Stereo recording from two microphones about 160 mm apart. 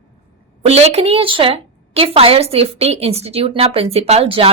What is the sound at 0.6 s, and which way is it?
A woman's voice, 40° right (ahead or behind).